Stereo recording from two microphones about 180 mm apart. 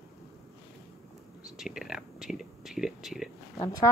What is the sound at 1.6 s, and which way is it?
Speech, centre (ahead or behind).